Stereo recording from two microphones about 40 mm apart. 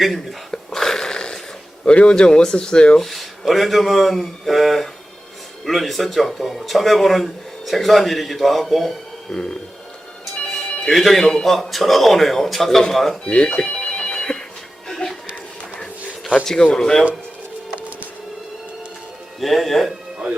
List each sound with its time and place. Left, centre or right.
0.0 s speech: centre
0.5 s a sound: centre
1.8 s speech: left
3.0 s speech: centre
10.9 s speech: centre
13.2 s telephone bell ringing: left
14.8 s music: centre
16.4 s speech: centre
17.7 s music: right
19.4 s speech: centre